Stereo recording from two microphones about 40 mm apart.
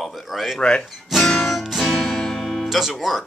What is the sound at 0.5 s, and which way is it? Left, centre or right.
Speech, left.